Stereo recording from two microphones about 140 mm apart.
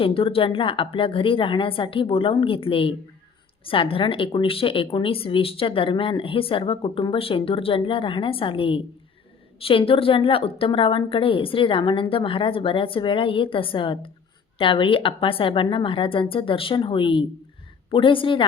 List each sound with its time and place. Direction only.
0.0 s speech: 40° left (ahead or behind)